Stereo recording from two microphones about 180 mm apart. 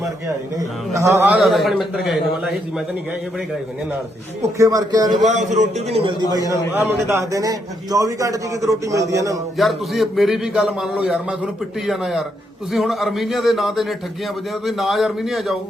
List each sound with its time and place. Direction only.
0.9 s a man's voice: 15° right (ahead or behind)
4.5 s speech: 20° right (ahead or behind)
5.2 s a man's voice: 40° right (ahead or behind); by 6.4 s 25° right (ahead or behind)
6.4 s a man's voice: 20° left (ahead or behind)
6.7 s a man's voice: 15° right (ahead or behind)
9.6 s a man's voice: centre (ahead or behind)